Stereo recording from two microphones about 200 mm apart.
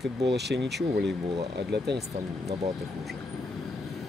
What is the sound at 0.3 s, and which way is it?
Speech, 60° right (ahead or behind).